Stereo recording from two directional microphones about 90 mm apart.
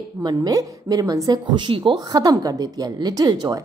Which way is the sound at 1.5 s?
60° right (ahead or behind).